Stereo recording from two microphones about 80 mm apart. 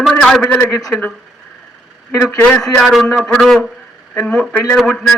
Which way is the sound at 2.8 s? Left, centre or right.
Centre.